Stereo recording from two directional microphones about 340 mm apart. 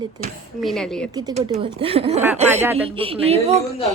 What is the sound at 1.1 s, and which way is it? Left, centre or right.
A woman's voice, centre.